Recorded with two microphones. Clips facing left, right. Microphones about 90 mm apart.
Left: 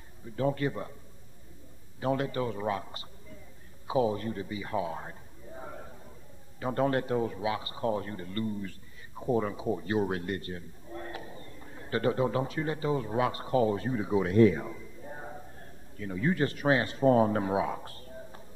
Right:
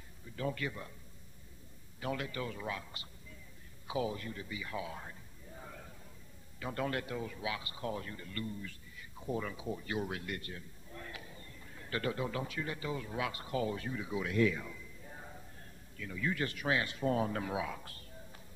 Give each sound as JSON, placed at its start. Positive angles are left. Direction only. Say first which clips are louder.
{"t": 0.4, "sound": "a man's voice", "louder": "left 8 dB", "side_deg": 35}
{"t": 2.0, "sound": "a man's voice", "louder": "left 9 dB", "side_deg": 35}
{"t": 3.8, "sound": "a sound", "louder": "left 9 dB", "side_deg": 35}
{"t": 6.6, "sound": "a man's voice", "louder": "left 9 dB", "side_deg": 35}